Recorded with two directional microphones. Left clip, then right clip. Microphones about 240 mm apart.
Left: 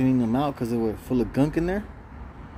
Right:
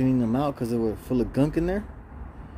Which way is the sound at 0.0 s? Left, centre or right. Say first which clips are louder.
Left 1 dB; centre.